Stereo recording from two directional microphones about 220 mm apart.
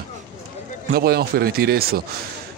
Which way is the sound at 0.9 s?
45° right (ahead or behind).